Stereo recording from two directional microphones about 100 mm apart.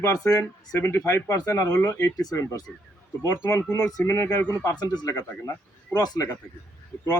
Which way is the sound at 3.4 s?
35° left (ahead or behind).